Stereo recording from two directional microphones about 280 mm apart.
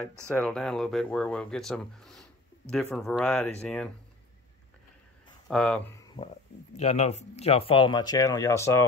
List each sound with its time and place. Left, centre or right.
0.3 s speech: centre
5.5 s speech: centre
6.7 s speech: left